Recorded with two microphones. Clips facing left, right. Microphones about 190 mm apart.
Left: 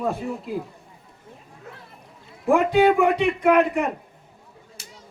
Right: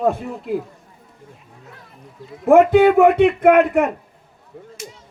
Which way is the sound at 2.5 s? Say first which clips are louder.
Right 6 dB; 55° right (ahead or behind).